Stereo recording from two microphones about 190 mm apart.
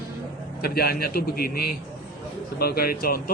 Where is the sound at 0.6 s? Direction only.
55° left (ahead or behind).